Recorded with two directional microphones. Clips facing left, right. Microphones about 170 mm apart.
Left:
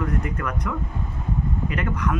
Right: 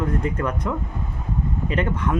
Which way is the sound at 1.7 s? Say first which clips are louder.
Right 4 dB; 25° right (ahead or behind).